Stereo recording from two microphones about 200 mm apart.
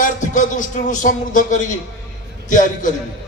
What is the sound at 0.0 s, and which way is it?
A man's voice, 40° left (ahead or behind).